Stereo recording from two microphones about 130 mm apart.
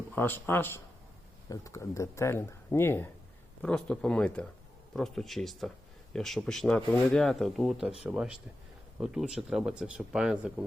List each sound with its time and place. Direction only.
0.1 s speech: 15° left (ahead or behind)
3.6 s speech: 10° left (ahead or behind)